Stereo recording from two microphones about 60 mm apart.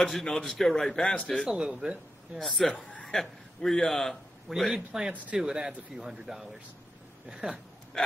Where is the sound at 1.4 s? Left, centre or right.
Centre.